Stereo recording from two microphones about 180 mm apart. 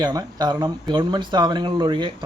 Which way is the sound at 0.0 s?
20° right (ahead or behind).